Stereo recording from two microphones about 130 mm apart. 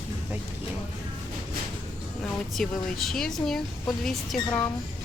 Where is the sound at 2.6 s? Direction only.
Centre (ahead or behind).